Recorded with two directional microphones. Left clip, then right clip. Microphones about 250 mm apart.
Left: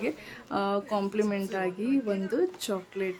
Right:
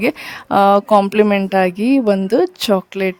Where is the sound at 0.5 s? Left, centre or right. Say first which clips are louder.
Right 18 dB; right.